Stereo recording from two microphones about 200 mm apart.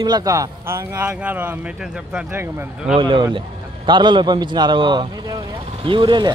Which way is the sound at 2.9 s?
25° right (ahead or behind).